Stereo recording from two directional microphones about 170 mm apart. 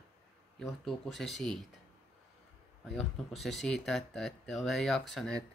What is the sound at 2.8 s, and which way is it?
Speech, centre (ahead or behind).